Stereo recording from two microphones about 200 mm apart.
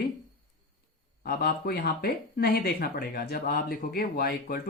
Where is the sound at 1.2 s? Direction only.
50° left (ahead or behind).